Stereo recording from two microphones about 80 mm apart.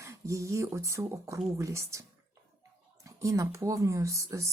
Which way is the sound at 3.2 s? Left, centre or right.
Right.